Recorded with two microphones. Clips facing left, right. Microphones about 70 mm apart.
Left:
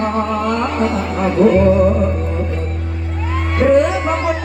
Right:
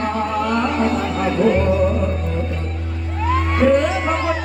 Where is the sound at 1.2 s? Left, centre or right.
Centre.